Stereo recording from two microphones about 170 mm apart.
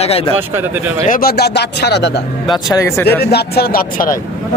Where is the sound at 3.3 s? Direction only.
65° left (ahead or behind).